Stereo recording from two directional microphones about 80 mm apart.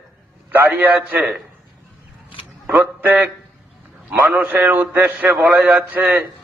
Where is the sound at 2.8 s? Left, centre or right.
Right.